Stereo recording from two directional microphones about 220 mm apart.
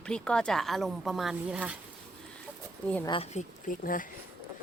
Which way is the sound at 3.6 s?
40° left (ahead or behind).